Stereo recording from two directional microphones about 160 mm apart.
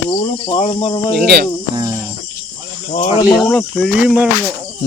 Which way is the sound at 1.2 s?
90° right.